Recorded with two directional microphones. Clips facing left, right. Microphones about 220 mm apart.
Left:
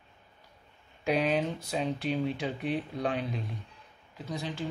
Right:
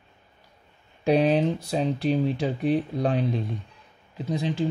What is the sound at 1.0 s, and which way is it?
Speech, 35° right (ahead or behind).